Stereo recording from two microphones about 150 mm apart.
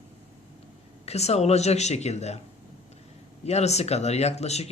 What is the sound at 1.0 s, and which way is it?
Speech, 45° left (ahead or behind).